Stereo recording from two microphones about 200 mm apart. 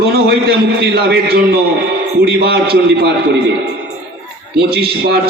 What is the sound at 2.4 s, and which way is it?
Speech, 55° right (ahead or behind).